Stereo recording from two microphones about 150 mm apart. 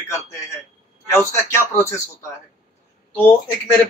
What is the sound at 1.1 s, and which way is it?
Speech, 20° left (ahead or behind).